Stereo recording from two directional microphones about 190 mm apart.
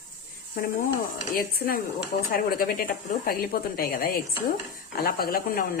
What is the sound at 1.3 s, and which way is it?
A woman's voice, 50° left (ahead or behind).